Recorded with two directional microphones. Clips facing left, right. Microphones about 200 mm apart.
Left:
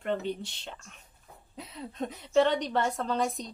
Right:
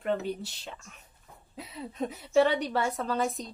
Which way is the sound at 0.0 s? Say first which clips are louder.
Right 1 dB; 5° right (ahead or behind).